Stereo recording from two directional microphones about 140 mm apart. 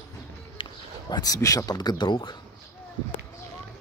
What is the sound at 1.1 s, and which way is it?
Speech, 25° left (ahead or behind).